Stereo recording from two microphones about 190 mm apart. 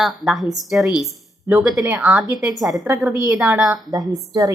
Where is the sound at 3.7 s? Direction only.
20° right (ahead or behind).